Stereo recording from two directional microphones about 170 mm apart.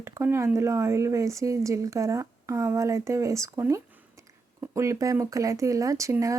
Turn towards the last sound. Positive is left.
turn(degrees=-20)  # may be behind; listen again after turning